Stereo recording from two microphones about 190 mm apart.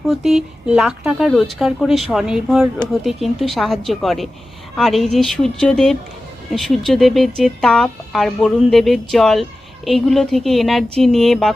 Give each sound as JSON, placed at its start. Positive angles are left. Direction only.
{"t": 0.1, "sound": "speech", "side_deg": 0}